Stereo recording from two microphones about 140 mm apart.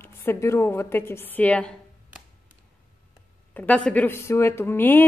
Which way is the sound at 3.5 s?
10° left (ahead or behind).